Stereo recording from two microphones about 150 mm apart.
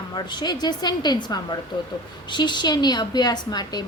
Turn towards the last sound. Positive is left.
turn(degrees=25)  # may be behind; listen again after turning